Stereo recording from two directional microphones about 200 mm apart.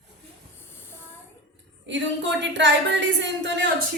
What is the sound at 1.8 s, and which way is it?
A woman's voice, 65° right (ahead or behind).